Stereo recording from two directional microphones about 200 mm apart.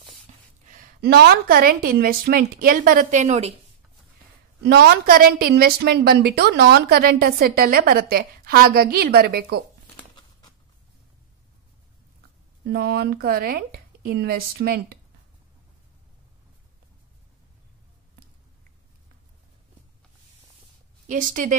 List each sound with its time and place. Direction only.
0.7 s a woman's voice: 45° right (ahead or behind)
4.6 s a woman's voice: 50° right (ahead or behind)
9.9 s a sound: 20° left (ahead or behind)
12.6 s a woman's voice: 50° right (ahead or behind)
21.1 s a woman's voice: 40° right (ahead or behind)